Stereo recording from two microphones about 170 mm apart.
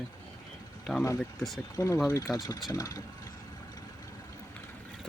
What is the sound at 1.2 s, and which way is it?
Speech, centre (ahead or behind).